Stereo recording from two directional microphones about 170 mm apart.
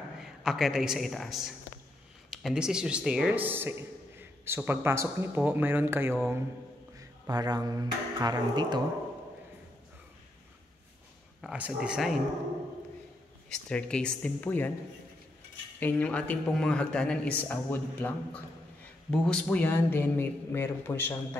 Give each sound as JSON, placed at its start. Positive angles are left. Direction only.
{"t": 0.2, "sound": "a man's voice", "side_deg": -5}
{"t": 11.4, "sound": "speech", "side_deg": -5}
{"t": 13.5, "sound": "a man's voice", "side_deg": 5}
{"t": 15.8, "sound": "a man's voice", "side_deg": 10}